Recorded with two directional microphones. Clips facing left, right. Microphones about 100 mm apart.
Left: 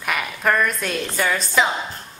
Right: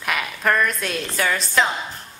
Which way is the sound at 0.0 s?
Centre (ahead or behind).